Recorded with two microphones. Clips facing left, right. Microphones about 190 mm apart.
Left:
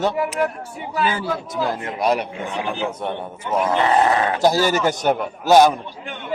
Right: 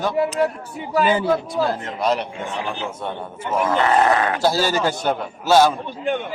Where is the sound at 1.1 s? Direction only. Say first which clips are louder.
Right 5 dB; 15° right (ahead or behind).